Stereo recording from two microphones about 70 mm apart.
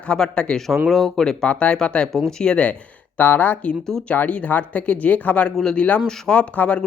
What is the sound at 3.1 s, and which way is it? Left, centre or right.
A man's voice, left.